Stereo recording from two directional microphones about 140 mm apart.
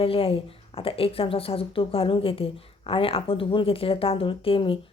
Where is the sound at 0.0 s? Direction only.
40° left (ahead or behind).